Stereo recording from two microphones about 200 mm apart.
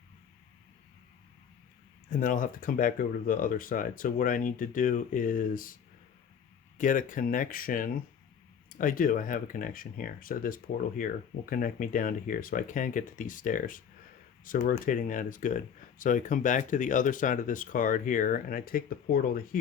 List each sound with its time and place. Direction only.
2.0 s speech: 40° left (ahead or behind)
6.7 s speech: 40° left (ahead or behind)